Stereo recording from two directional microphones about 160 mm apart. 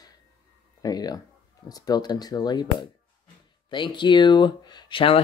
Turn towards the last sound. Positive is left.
turn(degrees=30)  # may be behind; listen again after turning